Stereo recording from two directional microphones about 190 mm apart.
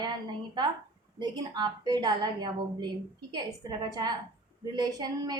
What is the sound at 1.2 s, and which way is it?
A woman's voice, 20° right (ahead or behind).